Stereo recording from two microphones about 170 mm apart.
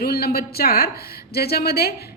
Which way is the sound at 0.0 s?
65° left (ahead or behind).